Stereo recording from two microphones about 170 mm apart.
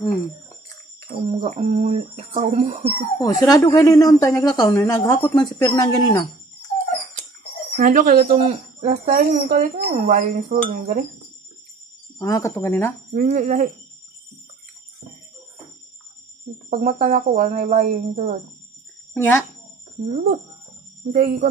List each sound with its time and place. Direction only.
1.1 s speech: 45° right (ahead or behind)
3.2 s a woman's voice: 20° left (ahead or behind)
7.8 s speech: 55° right (ahead or behind)
12.2 s speech: 20° left (ahead or behind)
13.1 s speech: 45° right (ahead or behind)
16.7 s speech: 40° right (ahead or behind)
19.1 s a child's voice: 10° left (ahead or behind)
20.1 s speech: 40° right (ahead or behind)